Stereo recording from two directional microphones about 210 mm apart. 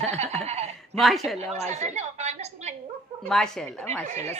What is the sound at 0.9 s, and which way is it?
Speech, centre (ahead or behind).